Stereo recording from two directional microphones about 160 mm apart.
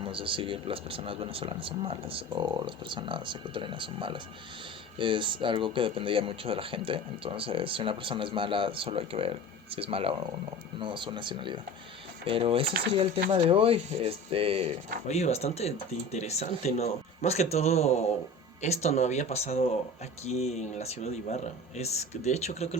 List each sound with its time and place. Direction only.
0.0 s speech: 30° right (ahead or behind)
15.0 s speech: 45° left (ahead or behind)